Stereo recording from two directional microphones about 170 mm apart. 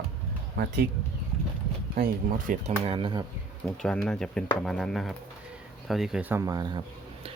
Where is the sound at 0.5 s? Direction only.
75° right (ahead or behind).